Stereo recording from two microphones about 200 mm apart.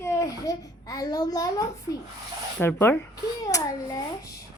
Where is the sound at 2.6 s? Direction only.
10° left (ahead or behind).